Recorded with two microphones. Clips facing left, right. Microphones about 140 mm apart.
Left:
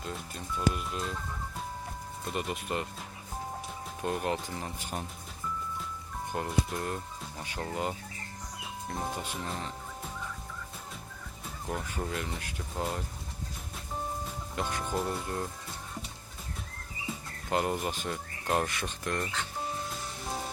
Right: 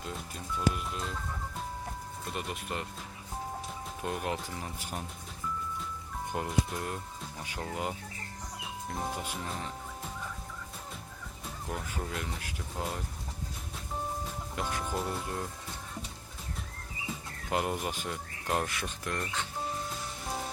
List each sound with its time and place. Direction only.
0.0 s music: 5° right (ahead or behind)
2.2 s speech: centre (ahead or behind)
4.0 s speech: centre (ahead or behind)
6.3 s speech: 15° right (ahead or behind)
6.7 s speech: 5° right (ahead or behind)
11.4 s speech: centre (ahead or behind)
14.3 s speech: 5° right (ahead or behind)
17.1 s speech: 5° right (ahead or behind)